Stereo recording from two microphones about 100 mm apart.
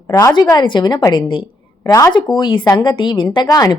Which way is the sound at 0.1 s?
35° left (ahead or behind).